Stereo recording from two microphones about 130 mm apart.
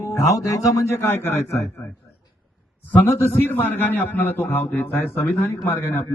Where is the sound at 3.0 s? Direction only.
15° left (ahead or behind).